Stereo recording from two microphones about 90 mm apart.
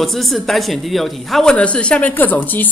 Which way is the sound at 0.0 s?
Centre (ahead or behind).